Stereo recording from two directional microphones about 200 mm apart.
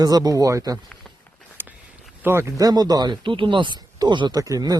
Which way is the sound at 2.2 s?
15° right (ahead or behind).